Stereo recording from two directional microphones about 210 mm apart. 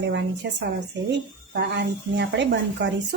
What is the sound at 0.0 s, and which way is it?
Speech, 55° right (ahead or behind).